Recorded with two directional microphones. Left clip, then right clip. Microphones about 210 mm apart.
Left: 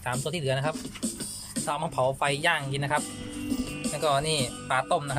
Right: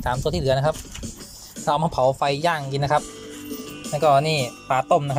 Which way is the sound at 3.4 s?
40° left (ahead or behind).